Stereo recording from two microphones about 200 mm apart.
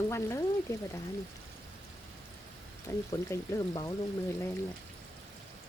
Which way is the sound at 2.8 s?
15° left (ahead or behind).